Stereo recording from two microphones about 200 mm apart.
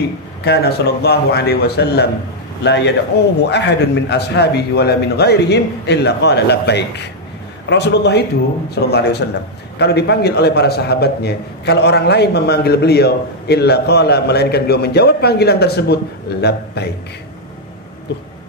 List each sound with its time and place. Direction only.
0.4 s a man's voice: 55° left (ahead or behind)